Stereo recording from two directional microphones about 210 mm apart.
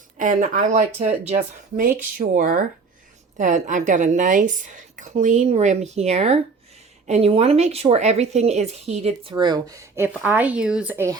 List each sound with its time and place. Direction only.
0.2 s speech: 35° right (ahead or behind); by 11.2 s 10° right (ahead or behind)